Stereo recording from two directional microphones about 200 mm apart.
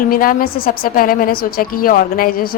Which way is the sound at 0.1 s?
45° left (ahead or behind).